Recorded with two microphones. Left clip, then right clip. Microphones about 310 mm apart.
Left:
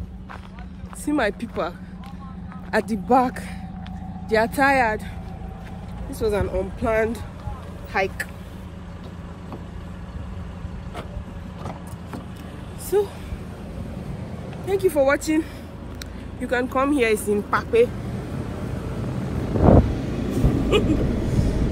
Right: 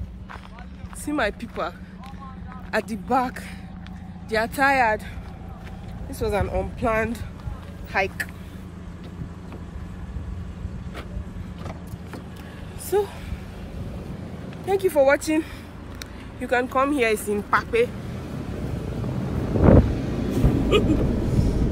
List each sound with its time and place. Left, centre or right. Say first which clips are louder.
1.0 s speech: left 2 dB; centre
2.7 s speech: left 4 dB; centre
6.1 s speech: left 2 dB; centre
12.9 s speech: left 2 dB; centre
14.7 s speech: right 1 dB; centre
19.4 s vehicle: left 1 dB; centre